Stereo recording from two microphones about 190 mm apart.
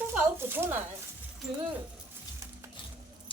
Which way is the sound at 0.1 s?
10° right (ahead or behind).